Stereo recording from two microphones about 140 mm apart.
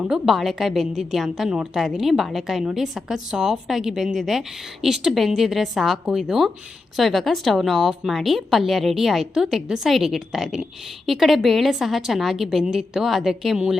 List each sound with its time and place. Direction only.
0.0 s a woman's voice: 5° right (ahead or behind)